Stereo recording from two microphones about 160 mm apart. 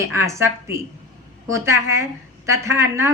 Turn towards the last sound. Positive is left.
turn(degrees=-15)  # may be behind; listen again after turning